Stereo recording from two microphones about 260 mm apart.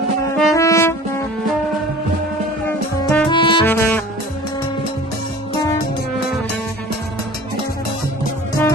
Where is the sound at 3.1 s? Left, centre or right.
Centre.